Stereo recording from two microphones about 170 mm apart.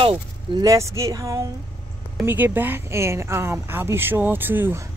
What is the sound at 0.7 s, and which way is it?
A woman's voice, 15° right (ahead or behind).